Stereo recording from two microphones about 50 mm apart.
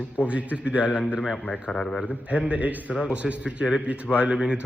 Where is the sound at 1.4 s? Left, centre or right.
Centre.